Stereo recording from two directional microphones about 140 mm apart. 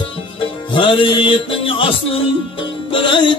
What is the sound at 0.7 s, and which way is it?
Music, 35° left (ahead or behind).